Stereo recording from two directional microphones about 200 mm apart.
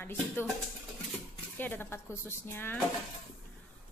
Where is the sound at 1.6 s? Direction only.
10° left (ahead or behind).